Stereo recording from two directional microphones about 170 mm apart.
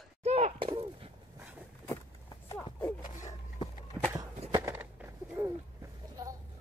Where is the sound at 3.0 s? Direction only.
45° left (ahead or behind).